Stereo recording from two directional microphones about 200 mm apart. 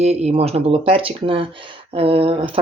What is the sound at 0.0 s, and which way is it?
Speech, 35° right (ahead or behind).